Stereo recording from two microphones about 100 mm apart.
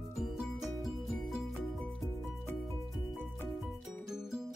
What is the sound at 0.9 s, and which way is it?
Music, centre (ahead or behind).